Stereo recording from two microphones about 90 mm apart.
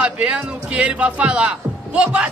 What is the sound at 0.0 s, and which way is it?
A man's voice, 15° right (ahead or behind).